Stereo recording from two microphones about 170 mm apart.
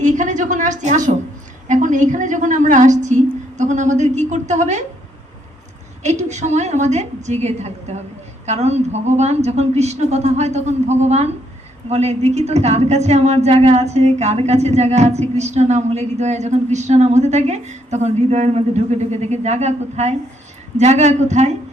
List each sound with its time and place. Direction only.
0.0 s a sound: 45° right (ahead or behind)
1.6 s a woman's voice: 45° right (ahead or behind)
6.0 s a woman's voice: 45° right (ahead or behind)